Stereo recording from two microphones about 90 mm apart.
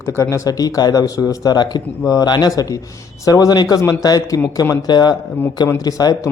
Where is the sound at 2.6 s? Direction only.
40° left (ahead or behind).